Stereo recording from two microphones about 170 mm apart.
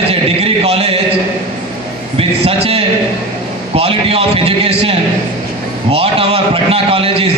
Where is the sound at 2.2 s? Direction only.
35° right (ahead or behind).